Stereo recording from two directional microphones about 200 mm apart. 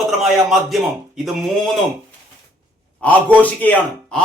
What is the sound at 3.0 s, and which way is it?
A man's voice, 10° left (ahead or behind).